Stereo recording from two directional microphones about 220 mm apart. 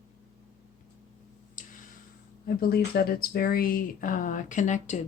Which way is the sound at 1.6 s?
35° left (ahead or behind).